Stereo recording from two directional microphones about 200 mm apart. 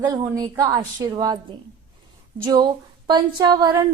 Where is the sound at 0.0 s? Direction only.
20° right (ahead or behind).